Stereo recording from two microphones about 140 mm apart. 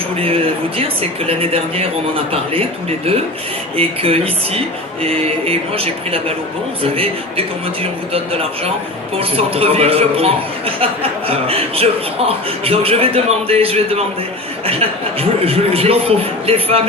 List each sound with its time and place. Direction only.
0.2 s a man's voice: 45° right (ahead or behind)
3.8 s a man's voice: 45° right (ahead or behind)